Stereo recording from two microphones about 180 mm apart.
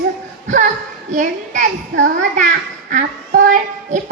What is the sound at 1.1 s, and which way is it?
A child's voice, 45° right (ahead or behind).